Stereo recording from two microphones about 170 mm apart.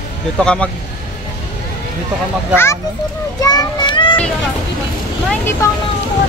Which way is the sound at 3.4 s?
25° left (ahead or behind).